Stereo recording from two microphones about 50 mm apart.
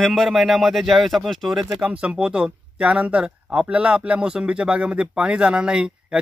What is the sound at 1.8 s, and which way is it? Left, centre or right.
Speech, right.